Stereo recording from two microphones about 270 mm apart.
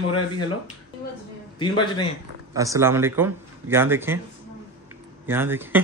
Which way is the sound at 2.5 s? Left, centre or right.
Centre.